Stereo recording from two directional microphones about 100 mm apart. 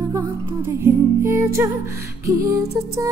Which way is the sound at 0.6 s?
25° right (ahead or behind).